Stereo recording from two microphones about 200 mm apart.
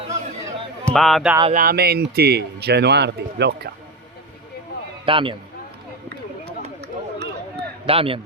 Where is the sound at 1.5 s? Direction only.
50° right (ahead or behind).